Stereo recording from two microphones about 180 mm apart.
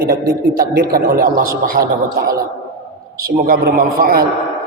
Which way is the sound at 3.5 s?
55° right (ahead or behind).